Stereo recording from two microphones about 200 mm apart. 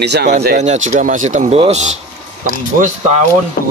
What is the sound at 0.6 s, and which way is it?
Speech, 35° right (ahead or behind).